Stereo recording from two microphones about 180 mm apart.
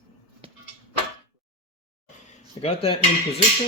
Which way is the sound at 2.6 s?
35° left (ahead or behind).